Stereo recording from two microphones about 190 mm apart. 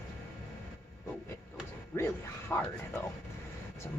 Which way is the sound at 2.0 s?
10° left (ahead or behind).